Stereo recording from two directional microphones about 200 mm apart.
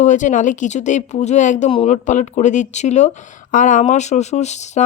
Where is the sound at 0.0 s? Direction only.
40° left (ahead or behind).